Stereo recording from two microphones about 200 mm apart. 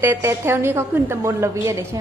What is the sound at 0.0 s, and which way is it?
A woman's voice, 10° right (ahead or behind).